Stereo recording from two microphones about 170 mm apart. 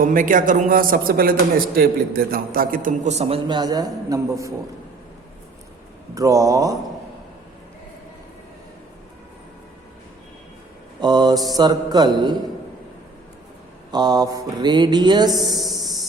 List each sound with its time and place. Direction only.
0.0 s speech: 50° right (ahead or behind); by 4.5 s 20° right (ahead or behind)
6.1 s mantra: 20° right (ahead or behind)
11.0 s mantra: 25° right (ahead or behind)
13.9 s mantra: 25° right (ahead or behind)
15.5 s a sound: centre (ahead or behind)